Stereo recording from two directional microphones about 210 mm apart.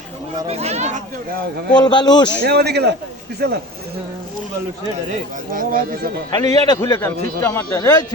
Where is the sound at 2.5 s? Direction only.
50° right (ahead or behind).